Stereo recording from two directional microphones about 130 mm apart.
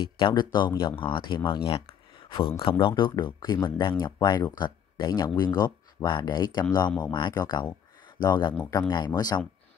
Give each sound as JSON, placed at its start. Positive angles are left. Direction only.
{"t": 0.0, "sound": "speech", "side_deg": 35}
{"t": 2.2, "sound": "a sound", "side_deg": 40}
{"t": 3.0, "sound": "speech", "side_deg": 35}